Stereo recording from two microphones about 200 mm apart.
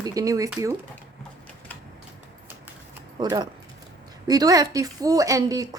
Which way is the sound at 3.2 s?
20° right (ahead or behind).